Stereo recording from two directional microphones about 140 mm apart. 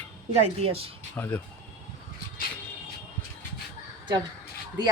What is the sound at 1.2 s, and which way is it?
Speech, 15° left (ahead or behind).